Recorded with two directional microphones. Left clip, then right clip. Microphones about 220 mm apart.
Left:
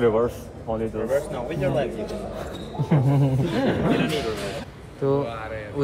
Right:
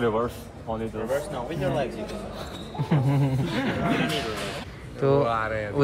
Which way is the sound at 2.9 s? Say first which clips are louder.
Left 3 dB; 15° right (ahead or behind).